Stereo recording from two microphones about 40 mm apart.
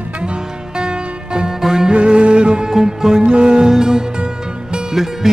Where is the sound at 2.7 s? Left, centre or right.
Centre.